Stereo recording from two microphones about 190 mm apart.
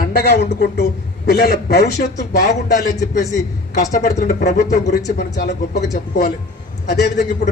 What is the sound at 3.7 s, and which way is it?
A woman's voice, 50° left (ahead or behind).